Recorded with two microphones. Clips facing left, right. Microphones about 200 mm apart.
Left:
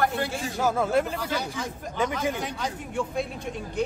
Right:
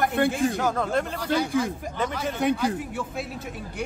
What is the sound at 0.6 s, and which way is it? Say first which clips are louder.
Speech: left 1 dB; 5° left (ahead or behind).